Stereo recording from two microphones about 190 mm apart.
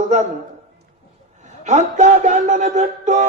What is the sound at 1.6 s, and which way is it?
A man's voice, 40° right (ahead or behind).